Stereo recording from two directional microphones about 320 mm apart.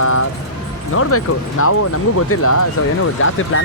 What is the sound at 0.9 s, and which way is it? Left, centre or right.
Speech, left.